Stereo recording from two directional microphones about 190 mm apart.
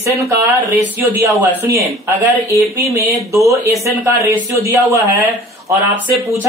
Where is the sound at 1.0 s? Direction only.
15° right (ahead or behind).